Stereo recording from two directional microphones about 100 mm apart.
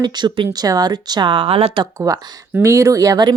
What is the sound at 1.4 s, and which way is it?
Speech, 85° right.